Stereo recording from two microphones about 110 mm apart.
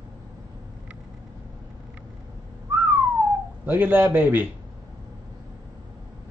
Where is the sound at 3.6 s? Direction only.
15° right (ahead or behind).